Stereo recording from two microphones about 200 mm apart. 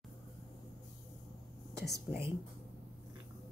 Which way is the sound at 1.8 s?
55° left (ahead or behind).